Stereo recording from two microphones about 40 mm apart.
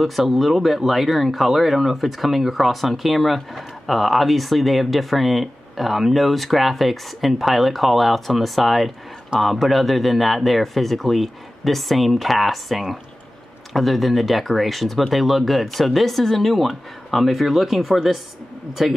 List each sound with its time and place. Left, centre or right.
0.0 s speech: centre